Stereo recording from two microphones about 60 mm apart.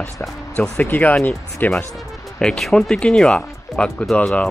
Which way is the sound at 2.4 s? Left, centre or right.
Centre.